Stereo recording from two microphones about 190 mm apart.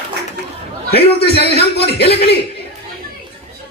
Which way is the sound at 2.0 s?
60° left (ahead or behind).